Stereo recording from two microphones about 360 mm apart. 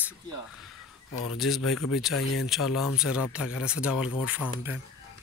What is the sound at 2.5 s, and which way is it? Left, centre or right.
Speech, centre.